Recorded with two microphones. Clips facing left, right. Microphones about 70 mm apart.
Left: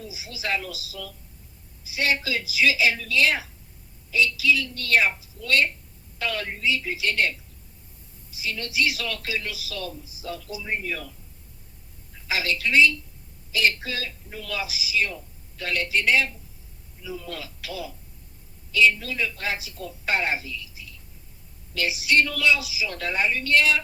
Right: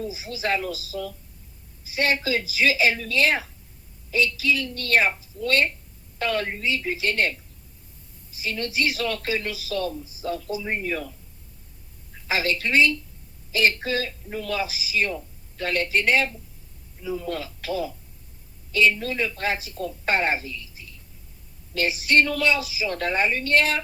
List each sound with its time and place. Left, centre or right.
0.0 s speech: right
12.3 s speech: right